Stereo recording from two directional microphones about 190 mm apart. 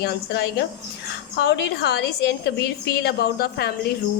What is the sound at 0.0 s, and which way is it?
A woman's voice, 60° left (ahead or behind).